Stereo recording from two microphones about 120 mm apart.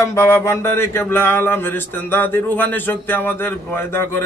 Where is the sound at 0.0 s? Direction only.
25° left (ahead or behind).